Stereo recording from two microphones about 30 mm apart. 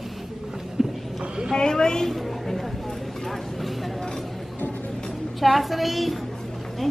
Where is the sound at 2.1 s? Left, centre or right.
Centre.